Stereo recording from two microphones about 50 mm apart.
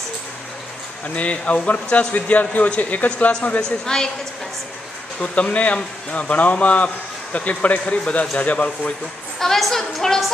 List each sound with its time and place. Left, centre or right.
1.0 s a man's voice: left
3.6 s a woman's voice: centre
5.2 s a man's voice: left
9.4 s a woman's voice: centre